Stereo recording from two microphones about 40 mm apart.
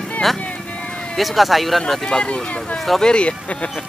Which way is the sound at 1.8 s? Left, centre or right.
Centre.